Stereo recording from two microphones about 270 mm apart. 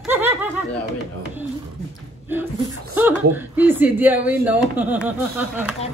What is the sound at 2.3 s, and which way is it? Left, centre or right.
Speech, centre.